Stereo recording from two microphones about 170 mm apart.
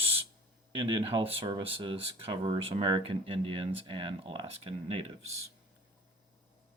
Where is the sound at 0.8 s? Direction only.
30° right (ahead or behind).